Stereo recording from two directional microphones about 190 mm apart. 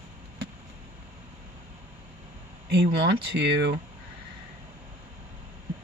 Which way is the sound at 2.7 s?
65° right (ahead or behind).